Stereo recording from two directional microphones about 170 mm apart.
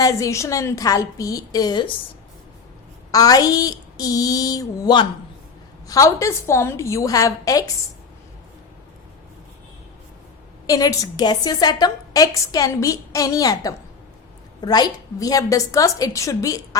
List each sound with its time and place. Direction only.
0.0 s a woman's voice: 20° left (ahead or behind)
3.1 s a woman's voice: 20° left (ahead or behind)
10.7 s a woman's voice: 20° left (ahead or behind)